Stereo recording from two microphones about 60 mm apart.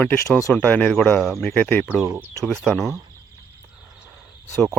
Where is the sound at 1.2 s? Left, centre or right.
Centre.